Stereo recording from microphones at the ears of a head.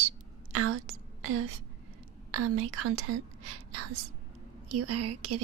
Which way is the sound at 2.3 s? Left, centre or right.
Right.